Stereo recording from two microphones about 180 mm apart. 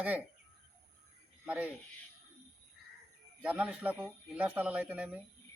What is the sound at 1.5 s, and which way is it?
Speech, 10° right (ahead or behind).